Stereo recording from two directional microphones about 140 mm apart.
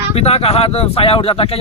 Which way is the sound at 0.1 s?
45° left (ahead or behind).